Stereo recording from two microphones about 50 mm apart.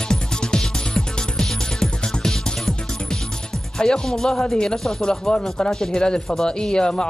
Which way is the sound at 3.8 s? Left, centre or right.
Centre.